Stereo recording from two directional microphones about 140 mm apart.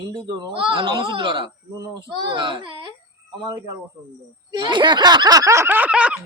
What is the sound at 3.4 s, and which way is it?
Snicker, 30° right (ahead or behind).